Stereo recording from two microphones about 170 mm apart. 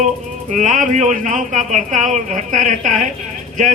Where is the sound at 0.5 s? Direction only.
50° right (ahead or behind).